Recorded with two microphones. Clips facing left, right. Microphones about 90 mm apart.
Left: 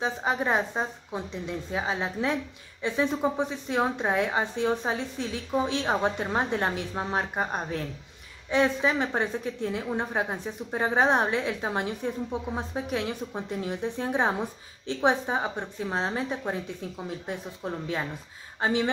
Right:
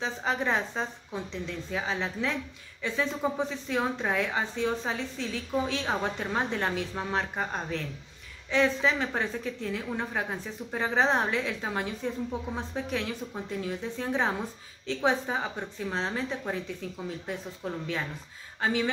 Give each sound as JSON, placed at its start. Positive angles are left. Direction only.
{"t": 0.0, "sound": "a woman's voice", "side_deg": 15}